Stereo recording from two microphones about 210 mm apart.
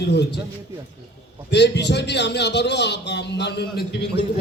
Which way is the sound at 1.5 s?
55° left (ahead or behind).